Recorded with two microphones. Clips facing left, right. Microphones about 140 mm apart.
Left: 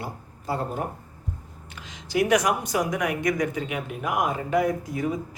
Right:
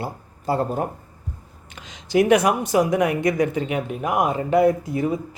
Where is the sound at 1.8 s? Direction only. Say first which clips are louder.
Right 6 dB; 20° right (ahead or behind).